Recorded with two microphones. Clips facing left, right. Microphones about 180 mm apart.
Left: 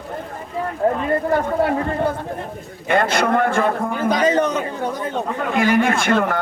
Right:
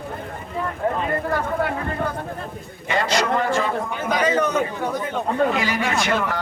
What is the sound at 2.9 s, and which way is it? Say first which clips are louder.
A man's voice: left 4 dB; 55° left (ahead or behind).